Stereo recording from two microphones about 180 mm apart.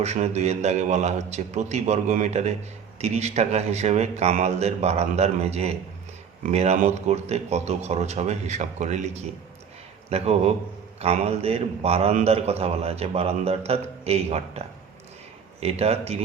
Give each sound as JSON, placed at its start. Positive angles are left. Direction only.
{"t": 0.0, "sound": "a man's voice", "side_deg": -40}
{"t": 10.1, "sound": "a man's voice", "side_deg": -35}